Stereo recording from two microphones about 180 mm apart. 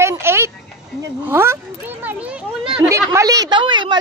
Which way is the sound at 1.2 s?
15° right (ahead or behind).